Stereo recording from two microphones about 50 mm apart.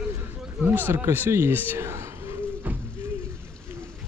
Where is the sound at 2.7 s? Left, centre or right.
Right.